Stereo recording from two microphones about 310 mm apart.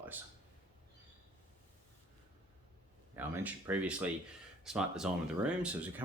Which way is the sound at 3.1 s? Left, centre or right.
Centre.